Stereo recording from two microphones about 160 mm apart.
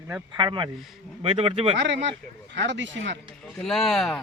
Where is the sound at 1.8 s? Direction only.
90° right.